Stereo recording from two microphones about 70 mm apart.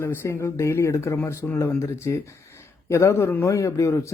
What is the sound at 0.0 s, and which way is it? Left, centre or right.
A man's voice, left.